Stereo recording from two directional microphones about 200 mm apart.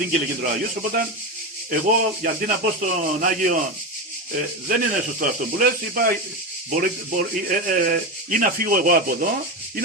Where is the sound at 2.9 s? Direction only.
40° right (ahead or behind).